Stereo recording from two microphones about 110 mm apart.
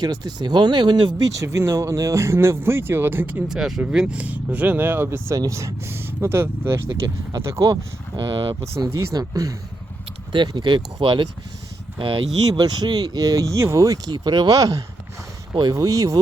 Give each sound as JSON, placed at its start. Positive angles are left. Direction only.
{"t": 0.0, "sound": "speech", "side_deg": -35}
{"t": 1.4, "sound": "speech", "side_deg": -25}
{"t": 3.5, "sound": "speech", "side_deg": -5}
{"t": 8.1, "sound": "speech", "side_deg": -45}
{"t": 8.9, "sound": "speech", "side_deg": -30}
{"t": 10.3, "sound": "speech", "side_deg": -45}
{"t": 12.5, "sound": "speech", "side_deg": -40}